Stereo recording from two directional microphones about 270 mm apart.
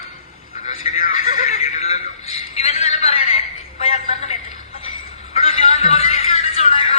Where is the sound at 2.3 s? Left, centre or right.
Left.